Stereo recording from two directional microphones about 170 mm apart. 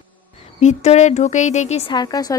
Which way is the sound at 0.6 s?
40° left (ahead or behind).